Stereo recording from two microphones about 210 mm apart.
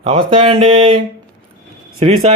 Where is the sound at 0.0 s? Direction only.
30° right (ahead or behind).